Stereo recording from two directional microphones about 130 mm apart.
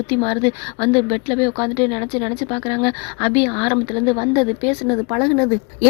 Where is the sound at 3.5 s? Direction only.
30° left (ahead or behind).